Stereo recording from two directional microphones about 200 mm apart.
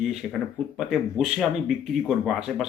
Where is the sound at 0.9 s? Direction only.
Centre (ahead or behind).